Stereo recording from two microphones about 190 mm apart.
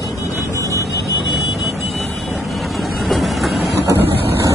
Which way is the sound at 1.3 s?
Centre (ahead or behind).